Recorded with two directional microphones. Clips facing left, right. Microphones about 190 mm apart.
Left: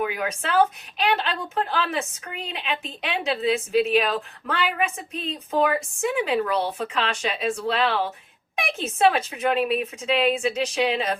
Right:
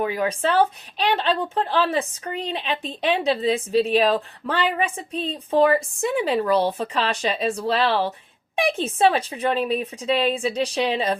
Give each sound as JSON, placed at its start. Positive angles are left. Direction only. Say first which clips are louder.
{"t": 0.0, "sound": "a woman's voice", "louder": "right 4 dB", "side_deg": -35}